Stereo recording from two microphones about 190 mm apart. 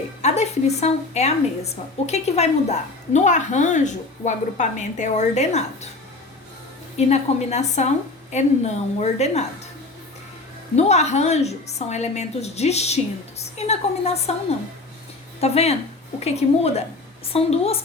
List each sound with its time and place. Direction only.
0.2 s a woman's voice: 35° left (ahead or behind)
6.9 s a woman's voice: 35° left (ahead or behind)
10.8 s a woman's voice: 35° left (ahead or behind)
15.4 s a woman's voice: 35° left (ahead or behind)